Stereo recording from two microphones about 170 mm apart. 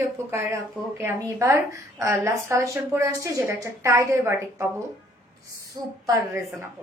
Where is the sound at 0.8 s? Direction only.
Centre (ahead or behind).